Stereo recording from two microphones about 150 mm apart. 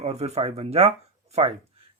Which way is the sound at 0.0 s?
45° right (ahead or behind).